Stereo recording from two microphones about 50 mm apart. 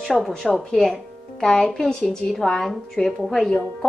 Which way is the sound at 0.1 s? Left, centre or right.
Centre.